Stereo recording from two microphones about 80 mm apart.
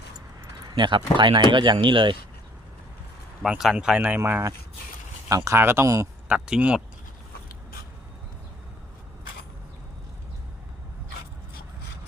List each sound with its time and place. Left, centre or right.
0.7 s speech: right
3.6 s speech: centre
3.9 s speech: centre
5.5 s speech: right
6.2 s speech: centre